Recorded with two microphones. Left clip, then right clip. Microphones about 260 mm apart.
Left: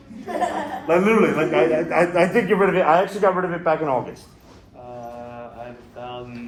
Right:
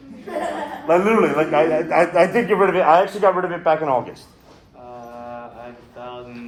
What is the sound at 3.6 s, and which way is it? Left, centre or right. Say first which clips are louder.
Speech: right 3 dB; right.